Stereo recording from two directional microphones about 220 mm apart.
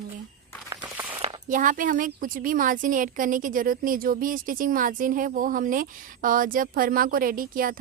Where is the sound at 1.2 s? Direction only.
25° right (ahead or behind).